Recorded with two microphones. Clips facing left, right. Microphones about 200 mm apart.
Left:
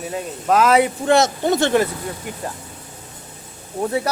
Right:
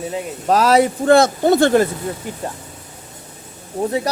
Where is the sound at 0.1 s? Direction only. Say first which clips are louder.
Even; 30° right (ahead or behind).